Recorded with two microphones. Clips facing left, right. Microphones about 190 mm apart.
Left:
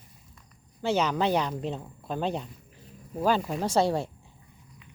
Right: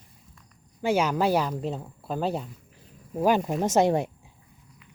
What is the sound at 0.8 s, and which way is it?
Speech, 10° right (ahead or behind).